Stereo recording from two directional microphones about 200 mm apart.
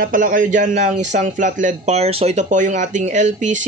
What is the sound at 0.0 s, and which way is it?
Speech, 45° right (ahead or behind).